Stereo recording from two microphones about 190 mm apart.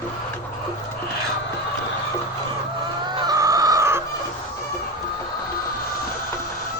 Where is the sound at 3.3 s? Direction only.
20° right (ahead or behind).